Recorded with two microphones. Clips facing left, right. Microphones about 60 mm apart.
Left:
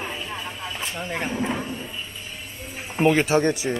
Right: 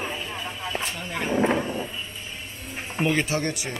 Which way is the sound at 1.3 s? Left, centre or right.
Right.